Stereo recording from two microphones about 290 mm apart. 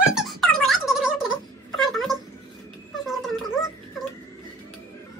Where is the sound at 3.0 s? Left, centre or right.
Centre.